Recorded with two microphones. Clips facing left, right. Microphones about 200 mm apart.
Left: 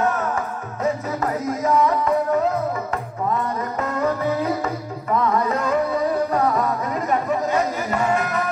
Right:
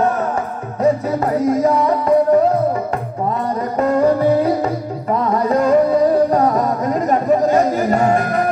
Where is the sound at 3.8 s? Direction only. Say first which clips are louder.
Right 9 dB; 35° right (ahead or behind).